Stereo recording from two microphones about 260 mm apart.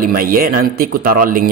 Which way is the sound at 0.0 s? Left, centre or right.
Right.